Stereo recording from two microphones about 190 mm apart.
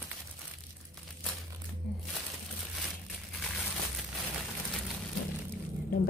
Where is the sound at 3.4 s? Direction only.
Centre (ahead or behind).